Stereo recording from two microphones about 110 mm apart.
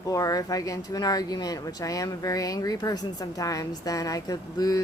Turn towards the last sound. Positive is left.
turn(degrees=35)  # may be behind; listen again after turning